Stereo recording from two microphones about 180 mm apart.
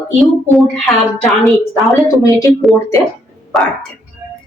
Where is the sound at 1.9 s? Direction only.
15° left (ahead or behind).